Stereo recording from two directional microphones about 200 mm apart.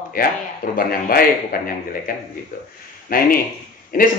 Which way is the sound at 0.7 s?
45° left (ahead or behind).